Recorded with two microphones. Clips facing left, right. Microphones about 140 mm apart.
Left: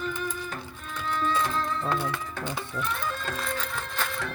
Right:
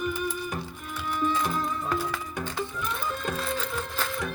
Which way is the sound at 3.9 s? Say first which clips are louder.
Right 1 dB; 15° right (ahead or behind).